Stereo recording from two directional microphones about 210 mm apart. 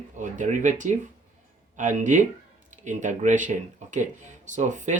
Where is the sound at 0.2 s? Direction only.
35° right (ahead or behind).